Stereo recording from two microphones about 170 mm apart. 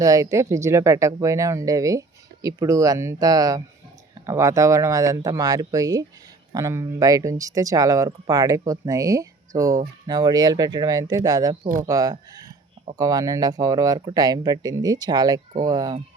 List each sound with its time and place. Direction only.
0.0 s speech: 20° right (ahead or behind)